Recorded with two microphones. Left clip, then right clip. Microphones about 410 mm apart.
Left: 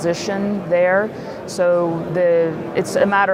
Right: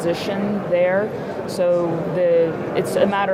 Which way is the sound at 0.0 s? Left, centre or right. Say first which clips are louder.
Left 1 dB; left.